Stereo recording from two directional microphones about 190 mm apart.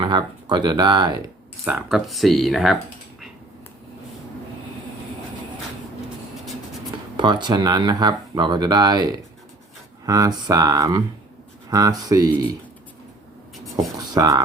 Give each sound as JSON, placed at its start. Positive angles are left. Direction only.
{"t": 0.0, "sound": "speech", "side_deg": -25}
{"t": 1.6, "sound": "speech", "side_deg": -5}
{"t": 7.2, "sound": "speech", "side_deg": -25}
{"t": 14.1, "sound": "speech", "side_deg": -20}